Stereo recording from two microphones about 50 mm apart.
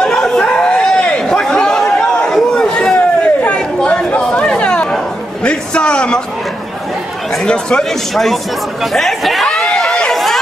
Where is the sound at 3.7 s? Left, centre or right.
Left.